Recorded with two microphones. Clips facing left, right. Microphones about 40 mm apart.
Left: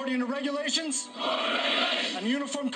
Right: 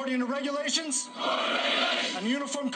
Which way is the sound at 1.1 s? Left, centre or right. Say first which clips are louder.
Right 1 dB; centre.